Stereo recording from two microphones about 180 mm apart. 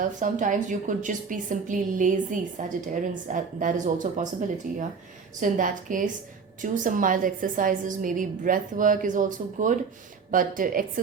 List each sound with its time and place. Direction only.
0.0 s a woman's voice: 45° right (ahead or behind)